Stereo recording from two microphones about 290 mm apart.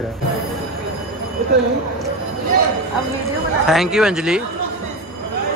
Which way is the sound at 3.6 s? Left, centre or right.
Centre.